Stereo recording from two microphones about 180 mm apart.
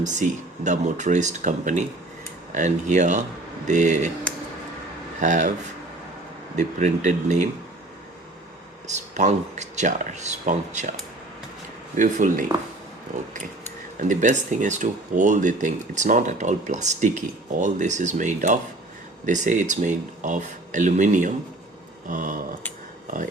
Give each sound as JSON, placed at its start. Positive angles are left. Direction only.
{"t": 0.0, "sound": "speech", "side_deg": -45}
{"t": 5.2, "sound": "speech", "side_deg": -45}
{"t": 6.6, "sound": "speech", "side_deg": -40}
{"t": 8.9, "sound": "speech", "side_deg": -40}
{"t": 11.9, "sound": "speech", "side_deg": -45}
{"t": 14.0, "sound": "speech", "side_deg": -45}
{"t": 22.0, "sound": "a sound", "side_deg": -45}